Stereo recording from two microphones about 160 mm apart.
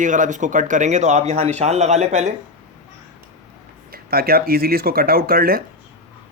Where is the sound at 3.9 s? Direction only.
70° right (ahead or behind).